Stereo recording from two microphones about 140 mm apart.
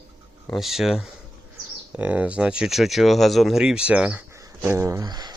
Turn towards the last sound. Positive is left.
turn(degrees=-30)  # may be behind; listen again after turning